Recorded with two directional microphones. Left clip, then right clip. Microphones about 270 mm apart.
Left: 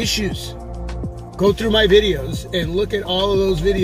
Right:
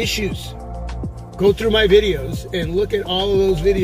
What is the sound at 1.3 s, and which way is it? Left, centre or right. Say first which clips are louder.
Speech: right 1 dB; centre.